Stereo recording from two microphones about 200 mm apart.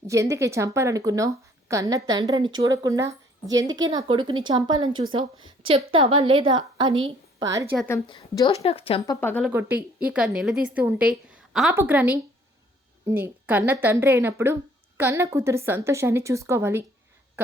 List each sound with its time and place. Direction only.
0.1 s a woman's voice: 15° right (ahead or behind)
7.9 s a woman's voice: 15° left (ahead or behind)
9.0 s speech: 10° left (ahead or behind)
9.4 s a woman's voice: 10° right (ahead or behind)